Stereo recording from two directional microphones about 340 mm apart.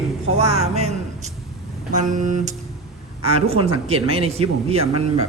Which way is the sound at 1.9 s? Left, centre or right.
Right.